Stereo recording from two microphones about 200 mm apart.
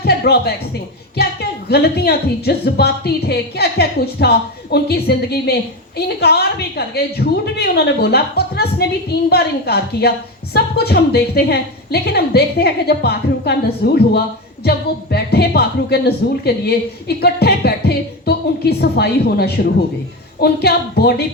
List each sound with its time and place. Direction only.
0.0 s a woman's voice: 50° left (ahead or behind)